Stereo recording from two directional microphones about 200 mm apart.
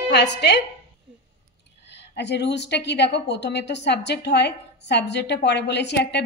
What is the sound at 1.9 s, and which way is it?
A woman's voice, 60° left (ahead or behind).